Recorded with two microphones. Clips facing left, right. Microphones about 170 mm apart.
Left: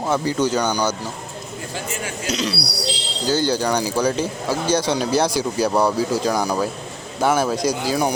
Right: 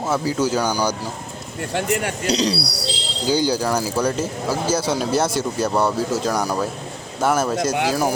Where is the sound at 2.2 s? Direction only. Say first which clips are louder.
Right 2 dB; 35° right (ahead or behind).